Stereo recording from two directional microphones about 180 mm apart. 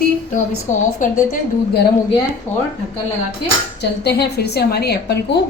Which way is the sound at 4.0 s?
65° left (ahead or behind).